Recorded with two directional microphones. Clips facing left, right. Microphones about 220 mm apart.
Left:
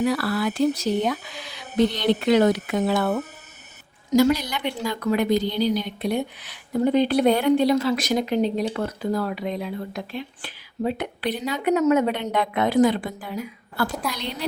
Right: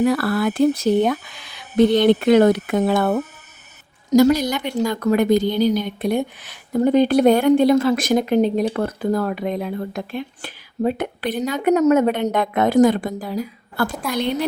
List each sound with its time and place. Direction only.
0.0 s a woman's voice: 50° right (ahead or behind)